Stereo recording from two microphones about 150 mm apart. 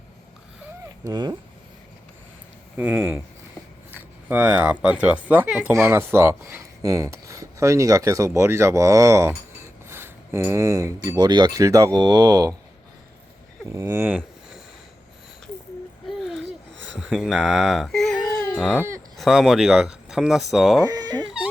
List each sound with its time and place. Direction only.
1.0 s speech: 30° right (ahead or behind)
2.7 s speech: 5° right (ahead or behind); by 12.5 s 25° right (ahead or behind)
13.7 s speech: 20° right (ahead or behind)
17.0 s speech: centre (ahead or behind)
18.5 s a sound: centre (ahead or behind)
19.1 s speech: centre (ahead or behind)
20.8 s cat: 25° right (ahead or behind)